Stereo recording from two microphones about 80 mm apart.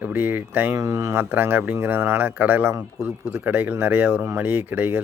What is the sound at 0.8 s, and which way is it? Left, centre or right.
A man's voice, right.